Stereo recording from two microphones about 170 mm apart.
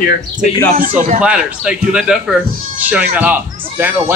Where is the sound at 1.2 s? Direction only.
5° right (ahead or behind).